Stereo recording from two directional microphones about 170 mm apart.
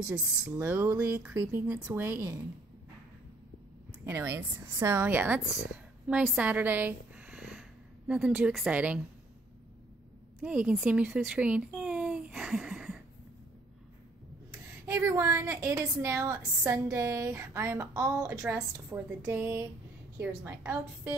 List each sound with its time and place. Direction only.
0.1 s a woman's voice: 10° right (ahead or behind)
4.0 s a woman's voice: 15° right (ahead or behind)
10.4 s speech: 5° right (ahead or behind)
14.5 s a woman's voice: 15° right (ahead or behind)